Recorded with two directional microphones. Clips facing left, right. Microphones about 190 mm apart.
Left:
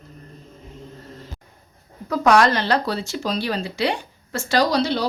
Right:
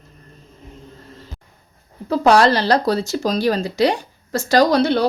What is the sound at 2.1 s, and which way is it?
Speech, 30° right (ahead or behind).